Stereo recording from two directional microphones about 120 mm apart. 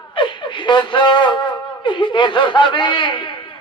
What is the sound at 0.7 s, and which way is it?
A man's voice, 40° left (ahead or behind).